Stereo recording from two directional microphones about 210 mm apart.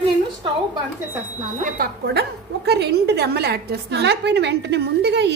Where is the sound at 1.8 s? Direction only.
50° right (ahead or behind).